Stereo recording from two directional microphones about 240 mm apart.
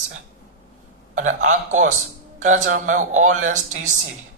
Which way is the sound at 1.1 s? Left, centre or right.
Right.